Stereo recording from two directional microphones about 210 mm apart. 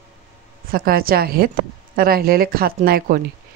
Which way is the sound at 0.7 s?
45° right (ahead or behind).